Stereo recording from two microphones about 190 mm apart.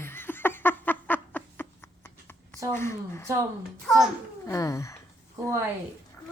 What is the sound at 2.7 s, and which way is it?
Speech, 15° left (ahead or behind).